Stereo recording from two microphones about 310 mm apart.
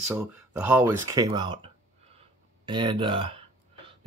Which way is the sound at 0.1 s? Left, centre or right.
Centre.